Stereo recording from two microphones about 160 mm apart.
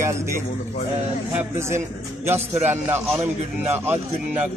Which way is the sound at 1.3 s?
15° right (ahead or behind).